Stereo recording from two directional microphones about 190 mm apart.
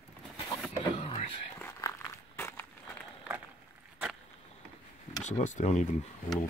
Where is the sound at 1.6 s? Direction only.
15° left (ahead or behind).